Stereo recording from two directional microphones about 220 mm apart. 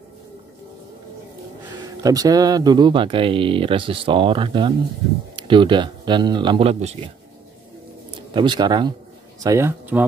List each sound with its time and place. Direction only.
2.0 s speech: 15° right (ahead or behind)
8.3 s speech: 20° right (ahead or behind)